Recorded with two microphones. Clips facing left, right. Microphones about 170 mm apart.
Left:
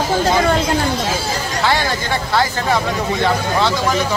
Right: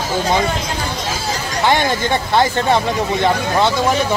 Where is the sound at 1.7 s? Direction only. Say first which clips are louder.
Right 4 dB; 20° right (ahead or behind).